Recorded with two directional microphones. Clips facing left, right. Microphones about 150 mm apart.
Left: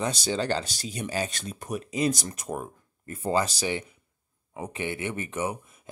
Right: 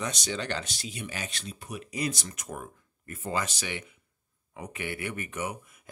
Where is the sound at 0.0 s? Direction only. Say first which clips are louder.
Left 5 dB; 30° left (ahead or behind).